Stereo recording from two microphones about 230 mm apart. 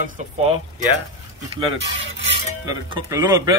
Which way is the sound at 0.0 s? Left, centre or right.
Right.